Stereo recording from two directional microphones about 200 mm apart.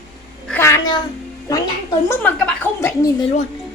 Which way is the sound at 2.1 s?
5° left (ahead or behind).